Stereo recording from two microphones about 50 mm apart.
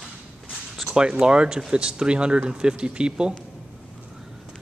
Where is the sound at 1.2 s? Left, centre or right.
Centre.